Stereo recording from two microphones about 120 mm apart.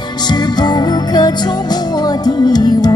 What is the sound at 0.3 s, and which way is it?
Music, 35° left (ahead or behind).